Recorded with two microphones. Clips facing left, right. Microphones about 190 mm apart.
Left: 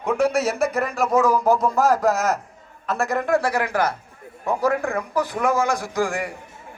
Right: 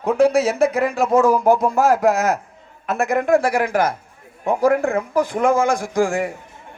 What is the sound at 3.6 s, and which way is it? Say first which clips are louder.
Speech: right 3 dB; 45° right (ahead or behind).